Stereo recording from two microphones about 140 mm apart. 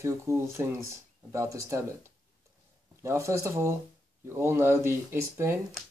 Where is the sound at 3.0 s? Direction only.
20° right (ahead or behind).